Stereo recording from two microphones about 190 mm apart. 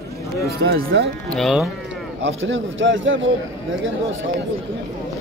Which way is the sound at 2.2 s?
80° right.